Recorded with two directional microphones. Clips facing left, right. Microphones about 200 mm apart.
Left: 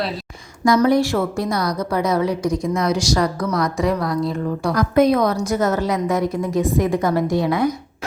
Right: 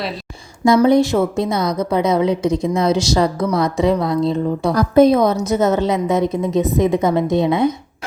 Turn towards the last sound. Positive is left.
turn(degrees=-25)  # may be behind; listen again after turning